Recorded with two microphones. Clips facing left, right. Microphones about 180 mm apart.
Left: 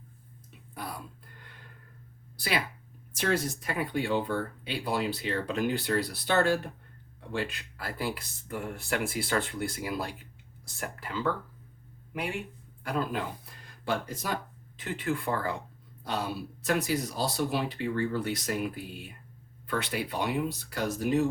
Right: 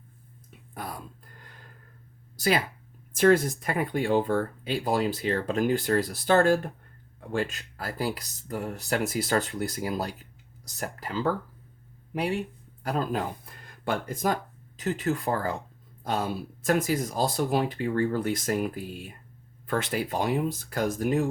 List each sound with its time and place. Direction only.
0.7 s whispering: 50° right (ahead or behind)
2.3 s a sound: 45° right (ahead or behind)
3.2 s speech: 50° right (ahead or behind)